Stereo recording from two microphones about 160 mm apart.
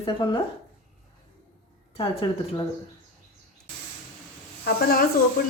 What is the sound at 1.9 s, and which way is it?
Speech, 35° left (ahead or behind).